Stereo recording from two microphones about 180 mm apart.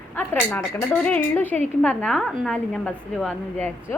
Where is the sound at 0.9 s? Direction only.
5° left (ahead or behind).